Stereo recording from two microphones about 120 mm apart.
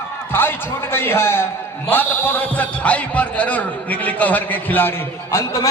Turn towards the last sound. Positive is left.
turn(degrees=25)  # may be behind; listen again after turning